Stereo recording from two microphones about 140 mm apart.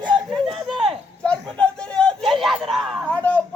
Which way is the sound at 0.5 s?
5° right (ahead or behind).